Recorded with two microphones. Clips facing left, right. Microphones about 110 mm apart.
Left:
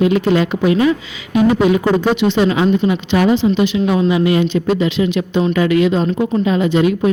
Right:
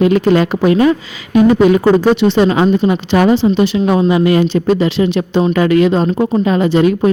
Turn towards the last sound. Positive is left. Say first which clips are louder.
# right 3 dB
turn(degrees=-40)  # may be behind; listen again after turning